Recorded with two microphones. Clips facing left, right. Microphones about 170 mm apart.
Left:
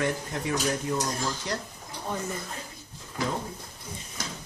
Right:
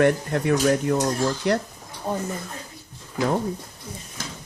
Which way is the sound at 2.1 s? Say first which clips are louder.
Right 6 dB; 50° right (ahead or behind).